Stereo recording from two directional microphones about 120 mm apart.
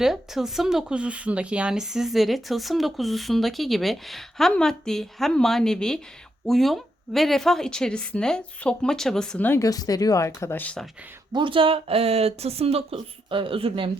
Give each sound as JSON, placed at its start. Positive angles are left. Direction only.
{"t": 0.0, "sound": "speech", "side_deg": -5}
{"t": 9.5, "sound": "speech", "side_deg": 30}
{"t": 11.3, "sound": "speech", "side_deg": -40}